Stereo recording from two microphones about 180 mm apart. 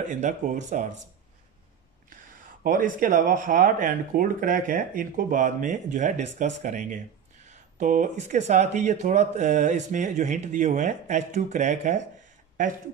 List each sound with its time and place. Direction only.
0.1 s speech: 40° right (ahead or behind)
2.6 s speech: 50° right (ahead or behind)